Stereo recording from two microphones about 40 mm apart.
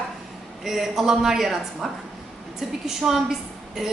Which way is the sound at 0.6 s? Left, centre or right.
Centre.